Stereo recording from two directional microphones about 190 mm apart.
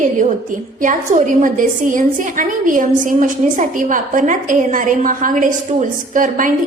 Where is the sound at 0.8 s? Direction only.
40° right (ahead or behind).